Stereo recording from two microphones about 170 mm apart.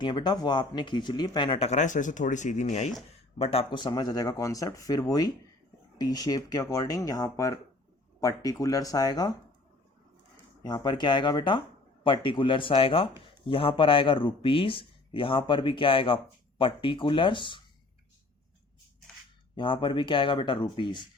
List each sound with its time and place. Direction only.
0.0 s speech: 25° left (ahead or behind)
10.6 s speech: 25° left (ahead or behind)
19.5 s speech: 30° left (ahead or behind)